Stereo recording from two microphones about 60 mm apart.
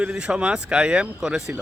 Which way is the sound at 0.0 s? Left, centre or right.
Centre.